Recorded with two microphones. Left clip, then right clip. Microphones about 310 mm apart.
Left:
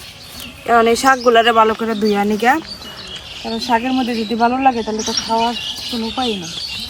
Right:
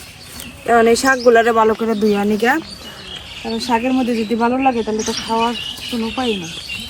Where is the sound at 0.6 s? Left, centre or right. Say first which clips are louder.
Left 1 dB; centre.